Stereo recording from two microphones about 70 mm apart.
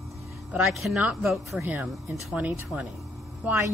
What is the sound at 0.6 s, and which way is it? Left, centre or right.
Speech, centre.